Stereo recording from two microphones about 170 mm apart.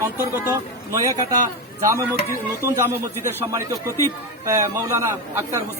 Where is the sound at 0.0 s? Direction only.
15° right (ahead or behind).